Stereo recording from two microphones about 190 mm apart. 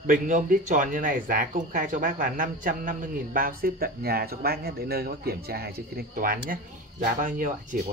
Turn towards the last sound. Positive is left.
turn(degrees=-45)  # may be behind; listen again after turning